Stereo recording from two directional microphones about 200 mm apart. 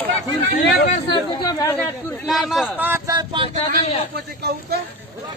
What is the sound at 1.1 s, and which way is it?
Speech, 20° left (ahead or behind).